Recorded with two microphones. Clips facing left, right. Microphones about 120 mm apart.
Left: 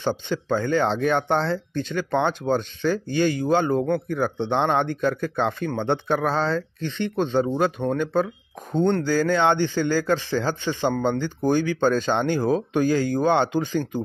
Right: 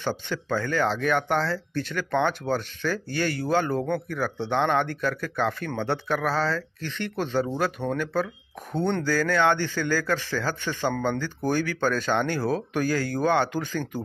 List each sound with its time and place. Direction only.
0.0 s a man's voice: 20° left (ahead or behind)